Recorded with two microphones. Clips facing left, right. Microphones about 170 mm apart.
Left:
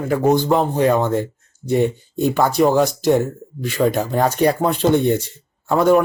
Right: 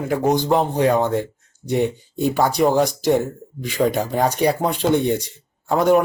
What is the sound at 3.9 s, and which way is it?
Speech, 5° left (ahead or behind).